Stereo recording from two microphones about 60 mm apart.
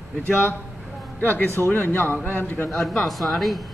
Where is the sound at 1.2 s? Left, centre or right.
Left.